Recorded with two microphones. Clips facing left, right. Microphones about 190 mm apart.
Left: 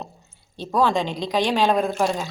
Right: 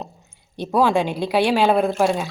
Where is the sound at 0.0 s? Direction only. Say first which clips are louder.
Right 2 dB; 15° right (ahead or behind).